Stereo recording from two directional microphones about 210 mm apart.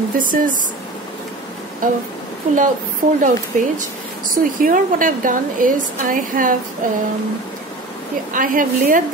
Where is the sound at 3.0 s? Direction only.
35° right (ahead or behind).